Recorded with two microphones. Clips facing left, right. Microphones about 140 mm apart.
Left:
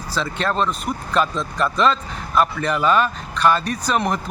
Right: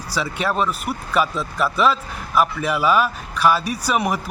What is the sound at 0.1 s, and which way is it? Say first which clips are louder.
Speech: even; 10° right (ahead or behind).